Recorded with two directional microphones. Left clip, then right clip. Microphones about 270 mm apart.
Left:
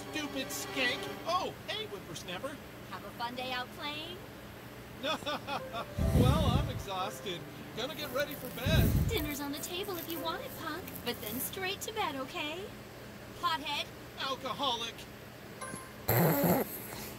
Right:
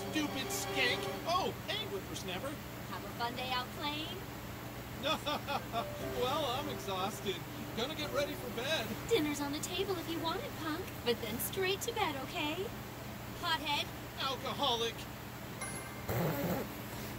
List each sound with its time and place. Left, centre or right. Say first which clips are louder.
0.1 s speech: even; centre
16.1 s dog: left 8 dB; left